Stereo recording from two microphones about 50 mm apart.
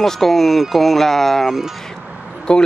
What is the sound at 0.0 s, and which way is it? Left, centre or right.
Speech, centre.